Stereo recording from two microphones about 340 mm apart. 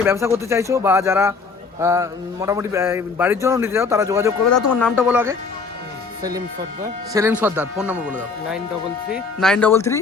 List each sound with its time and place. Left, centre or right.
0.0 s a man's voice: centre
4.4 s speech: left
4.7 s a man's voice: centre
7.1 s a man's voice: centre